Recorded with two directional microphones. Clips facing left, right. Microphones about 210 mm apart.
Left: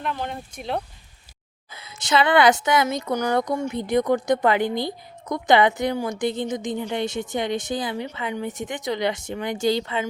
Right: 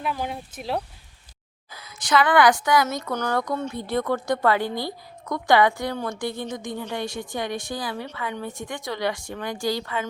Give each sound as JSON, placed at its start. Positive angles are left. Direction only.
{"t": 0.0, "sound": "speech", "side_deg": -5}
{"t": 1.7, "sound": "a woman's voice", "side_deg": 25}
{"t": 2.8, "sound": "a woman's voice", "side_deg": 10}